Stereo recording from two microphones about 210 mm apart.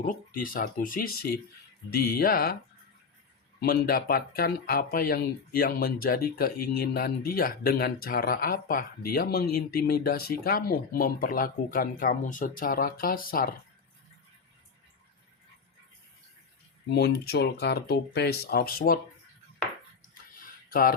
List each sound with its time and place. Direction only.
0.0 s speech: 40° left (ahead or behind)
3.6 s speech: 45° left (ahead or behind)
16.9 s speech: 50° left (ahead or behind)
20.3 s a sound: 45° left (ahead or behind)